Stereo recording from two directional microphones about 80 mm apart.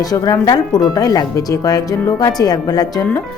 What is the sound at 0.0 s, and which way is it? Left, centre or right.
Speech, left.